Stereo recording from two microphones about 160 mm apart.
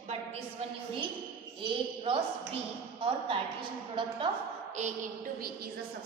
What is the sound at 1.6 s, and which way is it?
A woman's voice, 35° right (ahead or behind).